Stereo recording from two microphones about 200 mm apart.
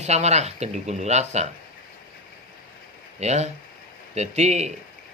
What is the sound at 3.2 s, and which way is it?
Speech, 35° right (ahead or behind).